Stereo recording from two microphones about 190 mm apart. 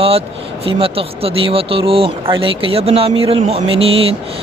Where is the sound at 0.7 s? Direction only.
30° right (ahead or behind).